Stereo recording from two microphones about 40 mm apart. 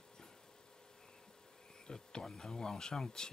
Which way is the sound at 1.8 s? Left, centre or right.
Centre.